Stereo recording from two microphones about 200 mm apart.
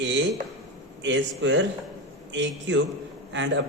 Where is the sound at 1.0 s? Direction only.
65° right (ahead or behind).